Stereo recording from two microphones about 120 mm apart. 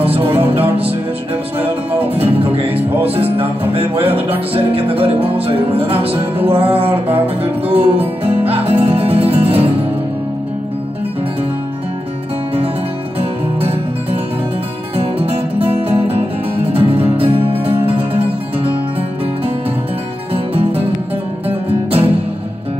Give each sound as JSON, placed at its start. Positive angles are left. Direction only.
{"t": 0.0, "sound": "music", "side_deg": -55}
{"t": 2.1, "sound": "music", "side_deg": -55}
{"t": 13.2, "sound": "music", "side_deg": -55}
{"t": 20.3, "sound": "music", "side_deg": -55}